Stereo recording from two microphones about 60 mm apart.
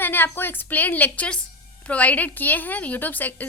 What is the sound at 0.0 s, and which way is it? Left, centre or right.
A woman's voice, left.